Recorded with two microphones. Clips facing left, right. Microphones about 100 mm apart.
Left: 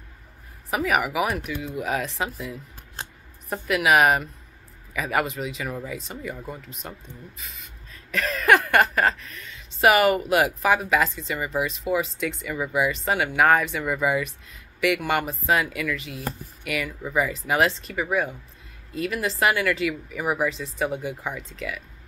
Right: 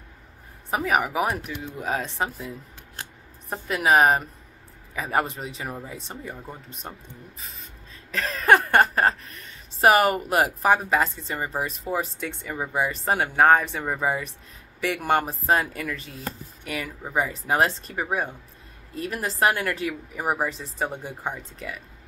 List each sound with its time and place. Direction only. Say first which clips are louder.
0.7 s speech: even; 35° right (ahead or behind)
3.0 s scissors: left 2 dB; 30° left (ahead or behind)
3.4 s speech: left 1 dB; 30° right (ahead or behind)